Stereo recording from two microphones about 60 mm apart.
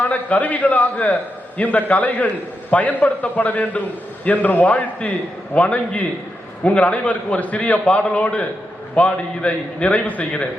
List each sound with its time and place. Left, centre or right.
0.0 s a man's voice: left